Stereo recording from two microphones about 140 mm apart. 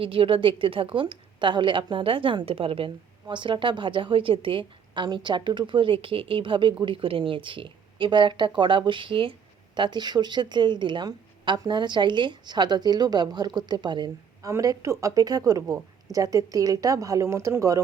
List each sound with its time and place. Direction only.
0.0 s a woman's voice: 40° right (ahead or behind)
14.4 s speech: 25° right (ahead or behind)